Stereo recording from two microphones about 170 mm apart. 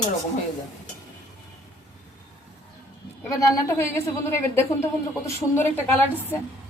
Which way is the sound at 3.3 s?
20° left (ahead or behind).